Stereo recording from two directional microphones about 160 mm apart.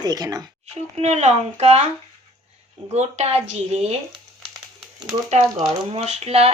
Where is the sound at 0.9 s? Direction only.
45° right (ahead or behind).